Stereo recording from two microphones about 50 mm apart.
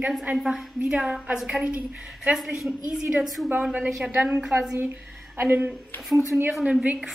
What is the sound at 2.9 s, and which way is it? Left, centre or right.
A woman's voice, right.